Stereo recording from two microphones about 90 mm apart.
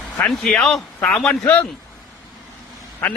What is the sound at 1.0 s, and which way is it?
Speech, 5° left (ahead or behind).